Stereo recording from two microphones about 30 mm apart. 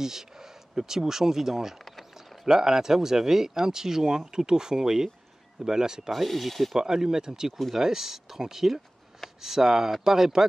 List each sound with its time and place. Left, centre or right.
0.0 s speech: centre
6.1 s speech: centre
6.8 s speech: centre